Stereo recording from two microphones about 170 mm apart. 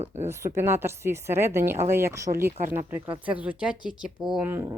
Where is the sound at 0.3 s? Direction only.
15° right (ahead or behind).